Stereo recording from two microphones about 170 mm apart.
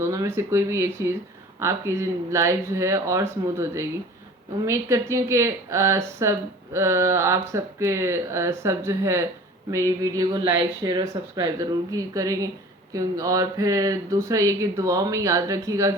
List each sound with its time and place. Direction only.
0.0 s speech: 15° right (ahead or behind)